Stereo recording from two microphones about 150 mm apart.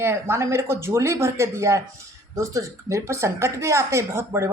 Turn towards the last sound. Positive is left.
turn(degrees=-15)  # may be behind; listen again after turning